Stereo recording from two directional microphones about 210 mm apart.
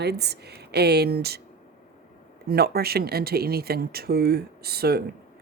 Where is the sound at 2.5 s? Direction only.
50° right (ahead or behind).